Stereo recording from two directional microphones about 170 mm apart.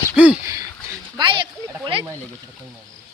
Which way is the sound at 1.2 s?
30° right (ahead or behind).